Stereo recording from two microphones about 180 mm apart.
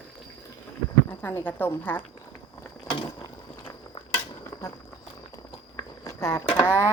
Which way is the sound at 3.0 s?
20° left (ahead or behind).